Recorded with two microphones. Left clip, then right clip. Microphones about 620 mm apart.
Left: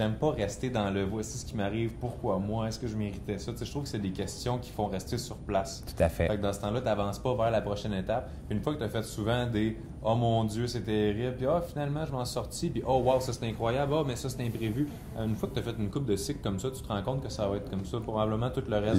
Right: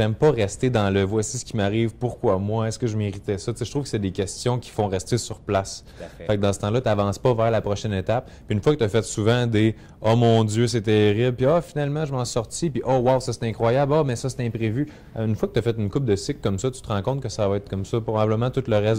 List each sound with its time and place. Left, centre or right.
0.0 s speech: right